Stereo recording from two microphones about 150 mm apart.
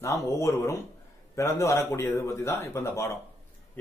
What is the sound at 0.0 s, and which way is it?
A man's voice, 20° left (ahead or behind).